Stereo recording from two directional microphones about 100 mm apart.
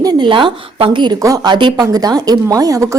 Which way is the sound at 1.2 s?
35° right (ahead or behind).